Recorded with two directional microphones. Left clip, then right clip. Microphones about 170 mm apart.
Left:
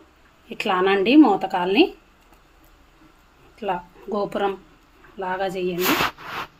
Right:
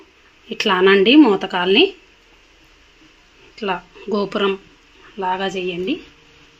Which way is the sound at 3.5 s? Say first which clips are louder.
Right 3 dB; 25° right (ahead or behind).